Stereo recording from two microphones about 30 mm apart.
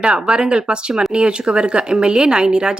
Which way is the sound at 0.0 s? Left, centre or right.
Right.